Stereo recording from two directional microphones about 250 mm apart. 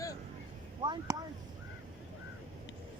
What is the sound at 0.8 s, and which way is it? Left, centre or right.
Speech, centre.